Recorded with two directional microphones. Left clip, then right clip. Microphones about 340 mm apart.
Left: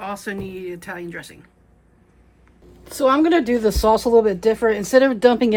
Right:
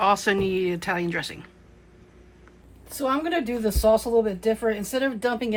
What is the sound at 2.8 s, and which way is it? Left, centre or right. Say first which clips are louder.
Speech: left 9 dB; left.